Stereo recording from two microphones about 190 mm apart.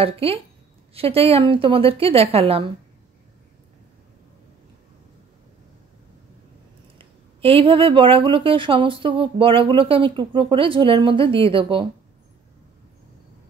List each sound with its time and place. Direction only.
0.0 s speech: 30° right (ahead or behind)
7.0 s speech: 25° right (ahead or behind)